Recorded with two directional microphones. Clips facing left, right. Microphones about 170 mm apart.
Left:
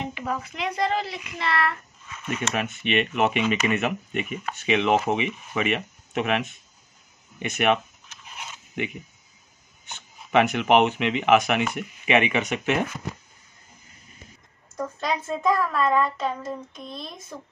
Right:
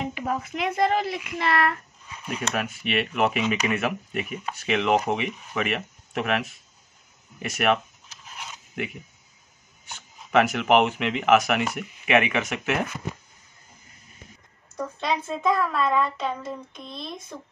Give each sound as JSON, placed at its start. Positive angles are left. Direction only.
{"t": 0.1, "sound": "speech", "side_deg": -45}
{"t": 2.0, "sound": "speech", "side_deg": -10}
{"t": 8.4, "sound": "a sound", "side_deg": 0}
{"t": 9.8, "sound": "speech", "side_deg": 0}
{"t": 14.8, "sound": "speech", "side_deg": 5}